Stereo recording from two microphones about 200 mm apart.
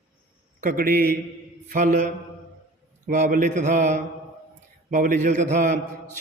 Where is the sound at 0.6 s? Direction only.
45° right (ahead or behind).